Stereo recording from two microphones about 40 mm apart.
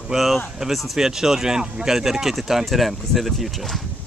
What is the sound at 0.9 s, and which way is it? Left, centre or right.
Speech, centre.